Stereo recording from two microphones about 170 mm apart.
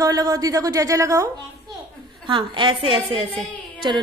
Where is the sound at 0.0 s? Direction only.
20° right (ahead or behind).